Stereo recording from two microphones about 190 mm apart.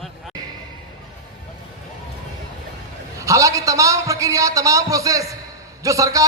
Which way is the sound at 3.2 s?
15° right (ahead or behind).